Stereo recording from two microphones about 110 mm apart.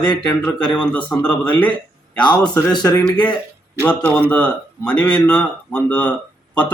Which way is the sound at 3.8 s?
15° left (ahead or behind).